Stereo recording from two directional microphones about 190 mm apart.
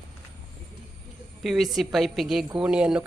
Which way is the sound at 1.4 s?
Centre (ahead or behind).